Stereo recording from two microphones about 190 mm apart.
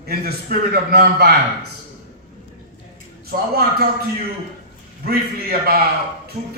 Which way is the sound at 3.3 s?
55° right (ahead or behind).